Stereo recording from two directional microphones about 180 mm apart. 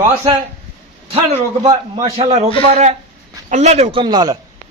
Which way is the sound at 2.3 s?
40° right (ahead or behind).